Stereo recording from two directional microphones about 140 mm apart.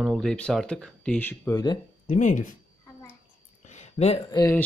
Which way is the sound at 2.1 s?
60° left (ahead or behind).